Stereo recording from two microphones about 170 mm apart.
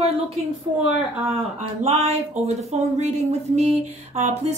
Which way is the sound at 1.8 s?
40° right (ahead or behind).